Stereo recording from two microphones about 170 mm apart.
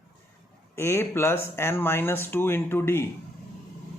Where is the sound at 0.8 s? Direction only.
15° left (ahead or behind).